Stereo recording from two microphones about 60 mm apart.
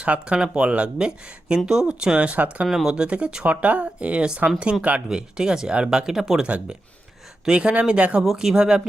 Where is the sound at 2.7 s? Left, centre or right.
Centre.